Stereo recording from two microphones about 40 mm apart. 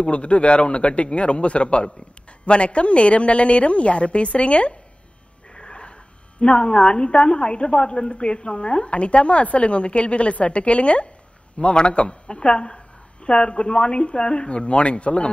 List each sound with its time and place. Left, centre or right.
0.0 s a woman's voice: left
5.5 s sniff: left
6.4 s a woman's voice: left